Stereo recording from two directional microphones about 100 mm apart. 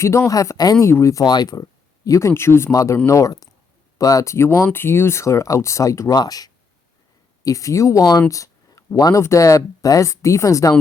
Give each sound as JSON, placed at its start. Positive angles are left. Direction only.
{"t": 0.0, "sound": "speech", "side_deg": 30}
{"t": 0.9, "sound": "speech", "side_deg": 30}
{"t": 1.2, "sound": "speech", "side_deg": 45}
{"t": 8.3, "sound": "a sound", "side_deg": 35}
{"t": 9.2, "sound": "speech", "side_deg": 30}